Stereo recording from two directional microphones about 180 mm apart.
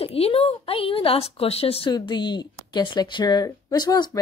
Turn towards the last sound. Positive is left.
turn(degrees=20)  # may be behind; listen again after turning